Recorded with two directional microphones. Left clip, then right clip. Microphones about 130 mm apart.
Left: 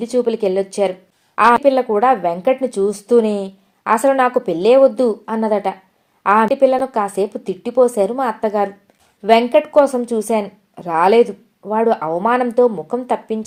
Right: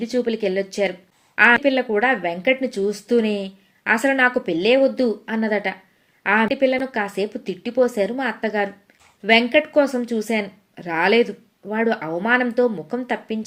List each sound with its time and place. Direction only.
0.0 s a woman's voice: 40° left (ahead or behind)